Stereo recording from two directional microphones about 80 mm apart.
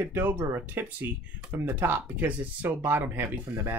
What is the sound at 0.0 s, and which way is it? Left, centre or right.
Speech, right.